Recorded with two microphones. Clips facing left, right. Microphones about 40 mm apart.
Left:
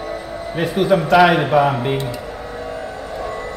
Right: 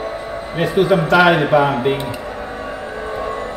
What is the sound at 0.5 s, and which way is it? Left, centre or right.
Speech, centre.